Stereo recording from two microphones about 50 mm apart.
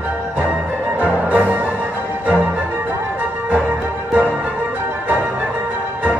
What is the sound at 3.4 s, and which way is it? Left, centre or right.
Music, right.